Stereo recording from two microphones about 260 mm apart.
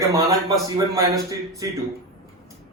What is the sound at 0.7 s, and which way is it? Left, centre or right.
A man's voice, centre.